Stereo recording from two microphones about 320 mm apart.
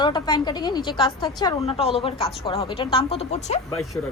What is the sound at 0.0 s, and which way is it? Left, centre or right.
A woman's voice, centre.